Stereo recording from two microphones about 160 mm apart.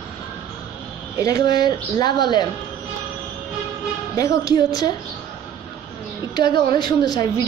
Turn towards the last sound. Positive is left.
turn(degrees=25)  # may be behind; listen again after turning